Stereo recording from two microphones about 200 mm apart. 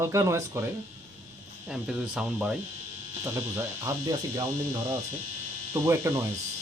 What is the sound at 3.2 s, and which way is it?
Speech, 15° right (ahead or behind).